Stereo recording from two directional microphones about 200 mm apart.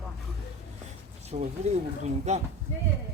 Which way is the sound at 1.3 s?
30° right (ahead or behind).